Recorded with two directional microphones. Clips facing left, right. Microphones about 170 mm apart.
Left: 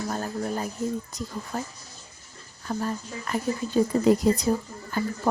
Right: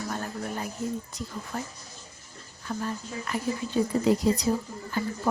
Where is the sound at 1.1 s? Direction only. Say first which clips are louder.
Left 2 dB; 40° left (ahead or behind).